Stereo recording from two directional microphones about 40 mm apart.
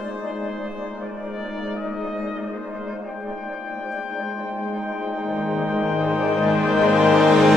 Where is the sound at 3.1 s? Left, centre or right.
Centre.